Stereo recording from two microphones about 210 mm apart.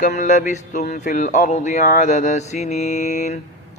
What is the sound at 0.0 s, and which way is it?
Mantra, 40° left (ahead or behind).